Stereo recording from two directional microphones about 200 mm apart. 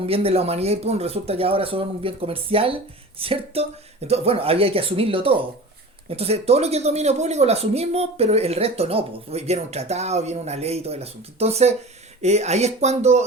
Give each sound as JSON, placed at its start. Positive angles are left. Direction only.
{"t": 0.0, "sound": "speech", "side_deg": -30}